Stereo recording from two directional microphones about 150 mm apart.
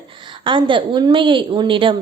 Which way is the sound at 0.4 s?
35° right (ahead or behind).